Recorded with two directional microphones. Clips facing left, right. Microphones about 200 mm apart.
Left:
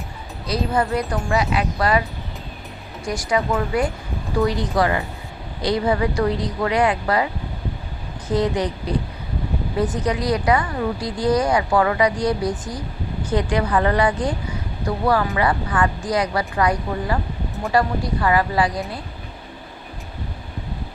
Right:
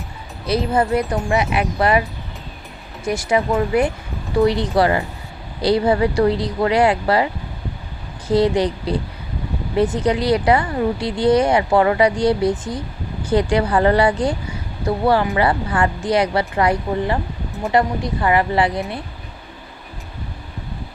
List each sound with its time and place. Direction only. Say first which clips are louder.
0.4 s a woman's voice: right 3 dB; 25° right (ahead or behind)
3.0 s a woman's voice: right 3 dB; 25° right (ahead or behind)
8.3 s a woman's voice: right 5 dB; 30° right (ahead or behind)